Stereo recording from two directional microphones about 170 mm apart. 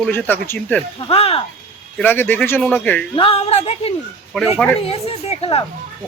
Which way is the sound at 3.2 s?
35° left (ahead or behind).